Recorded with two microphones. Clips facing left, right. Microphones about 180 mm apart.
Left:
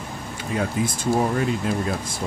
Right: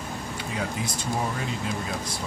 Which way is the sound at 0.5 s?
50° left (ahead or behind).